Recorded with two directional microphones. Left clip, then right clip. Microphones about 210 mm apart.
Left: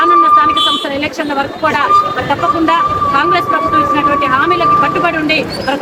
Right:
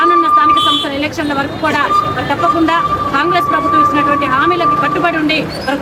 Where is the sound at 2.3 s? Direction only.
Centre (ahead or behind).